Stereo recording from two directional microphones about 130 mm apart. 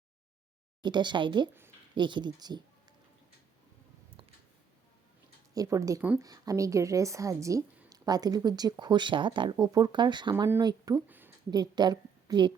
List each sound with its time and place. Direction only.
0.8 s speech: 35° right (ahead or behind)
5.5 s a woman's voice: 25° right (ahead or behind)